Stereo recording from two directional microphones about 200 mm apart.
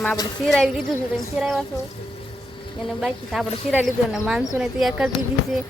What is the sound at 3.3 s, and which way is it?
Speech, centre (ahead or behind).